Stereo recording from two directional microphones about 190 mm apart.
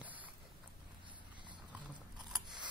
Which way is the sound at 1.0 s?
25° right (ahead or behind).